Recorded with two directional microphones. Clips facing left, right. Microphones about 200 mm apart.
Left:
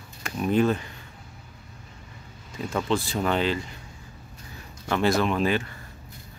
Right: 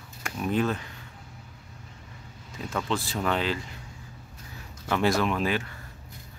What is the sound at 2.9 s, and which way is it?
Speech, centre (ahead or behind).